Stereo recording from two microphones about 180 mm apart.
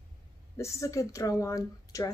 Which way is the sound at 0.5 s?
15° left (ahead or behind).